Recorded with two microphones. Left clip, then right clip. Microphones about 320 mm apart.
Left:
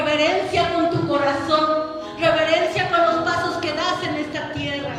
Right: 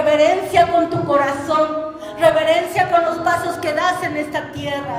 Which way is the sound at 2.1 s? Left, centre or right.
Right.